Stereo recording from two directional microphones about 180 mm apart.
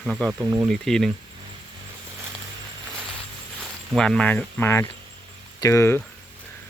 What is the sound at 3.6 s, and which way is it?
Speech, 5° left (ahead or behind).